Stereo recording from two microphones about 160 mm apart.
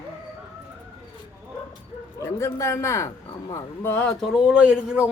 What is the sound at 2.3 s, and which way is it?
A man's voice, 15° left (ahead or behind).